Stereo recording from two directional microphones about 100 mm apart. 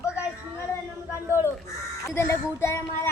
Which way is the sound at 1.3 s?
25° left (ahead or behind).